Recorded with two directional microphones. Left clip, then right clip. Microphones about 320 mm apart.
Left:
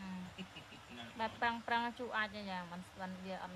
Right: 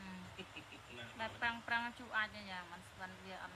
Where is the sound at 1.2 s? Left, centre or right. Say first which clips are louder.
Left 3 dB; left.